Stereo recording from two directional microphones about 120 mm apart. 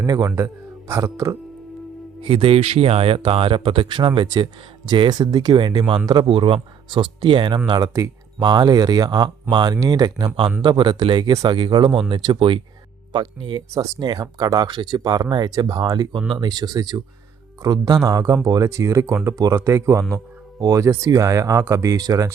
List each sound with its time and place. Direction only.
0.0 s speech: 30° right (ahead or behind)
2.2 s speech: 45° right (ahead or behind)
7.7 s speech: 30° right (ahead or behind)